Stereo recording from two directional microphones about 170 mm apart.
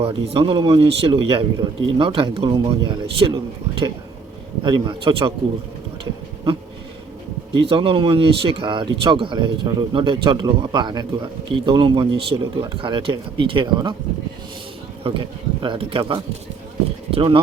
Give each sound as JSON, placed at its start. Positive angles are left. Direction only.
{"t": 0.0, "sound": "speech", "side_deg": -35}
{"t": 7.5, "sound": "speech", "side_deg": -30}
{"t": 15.1, "sound": "speech", "side_deg": -30}